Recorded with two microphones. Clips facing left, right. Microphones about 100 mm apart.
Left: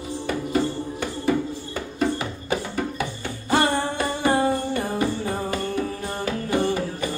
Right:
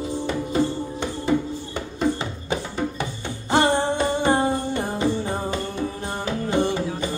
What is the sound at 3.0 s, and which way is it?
Music, 20° right (ahead or behind).